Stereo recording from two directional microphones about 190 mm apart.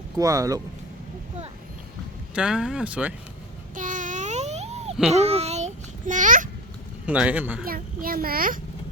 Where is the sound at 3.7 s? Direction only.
45° right (ahead or behind).